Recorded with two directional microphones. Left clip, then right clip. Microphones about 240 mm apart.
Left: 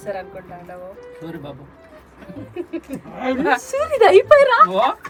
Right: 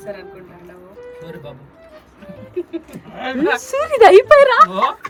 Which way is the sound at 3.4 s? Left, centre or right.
Right.